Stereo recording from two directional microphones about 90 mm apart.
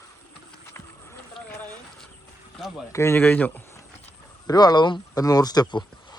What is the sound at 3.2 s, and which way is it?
Speech, 20° left (ahead or behind).